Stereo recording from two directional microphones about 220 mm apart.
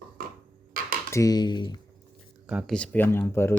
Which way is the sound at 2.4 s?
5° right (ahead or behind).